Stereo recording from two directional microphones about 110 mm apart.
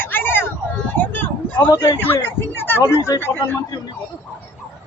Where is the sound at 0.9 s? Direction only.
15° left (ahead or behind).